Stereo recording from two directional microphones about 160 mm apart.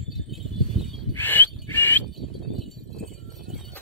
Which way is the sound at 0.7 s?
40° left (ahead or behind).